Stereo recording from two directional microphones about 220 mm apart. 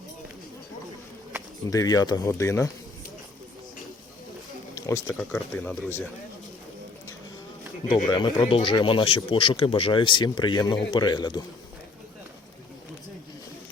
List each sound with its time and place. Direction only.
1.7 s speech: 15° left (ahead or behind)
4.7 s a sound: 15° left (ahead or behind)
5.1 s speech: 10° left (ahead or behind)
8.0 s speech: 20° left (ahead or behind)